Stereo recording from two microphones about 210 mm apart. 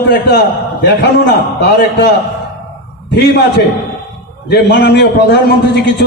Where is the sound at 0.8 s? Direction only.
55° left (ahead or behind).